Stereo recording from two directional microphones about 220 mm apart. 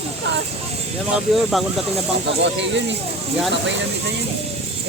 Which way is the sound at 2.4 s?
55° right (ahead or behind).